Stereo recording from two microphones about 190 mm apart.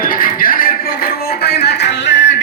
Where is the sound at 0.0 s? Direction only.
50° left (ahead or behind); by 2.2 s 70° left (ahead or behind).